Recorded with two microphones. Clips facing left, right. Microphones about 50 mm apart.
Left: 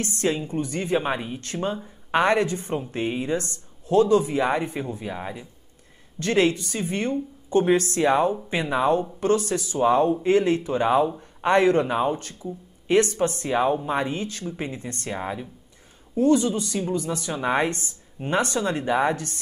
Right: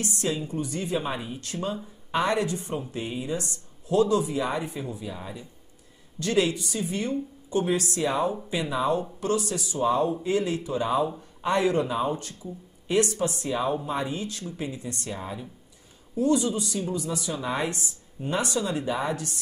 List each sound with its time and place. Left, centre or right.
0.0 s speech: left